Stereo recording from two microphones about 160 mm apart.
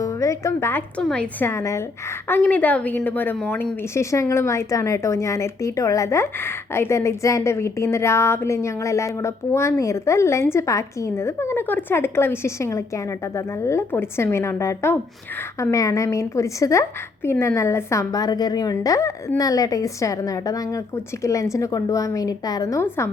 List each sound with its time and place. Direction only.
0.0 s a woman's voice: 20° left (ahead or behind)